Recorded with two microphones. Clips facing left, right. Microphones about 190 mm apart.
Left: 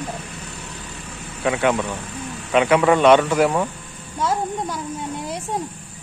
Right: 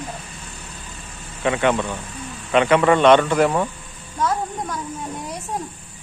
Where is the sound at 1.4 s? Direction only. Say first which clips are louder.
Even; 5° left (ahead or behind).